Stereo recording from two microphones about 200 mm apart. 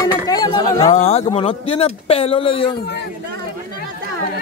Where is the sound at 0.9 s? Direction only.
35° left (ahead or behind).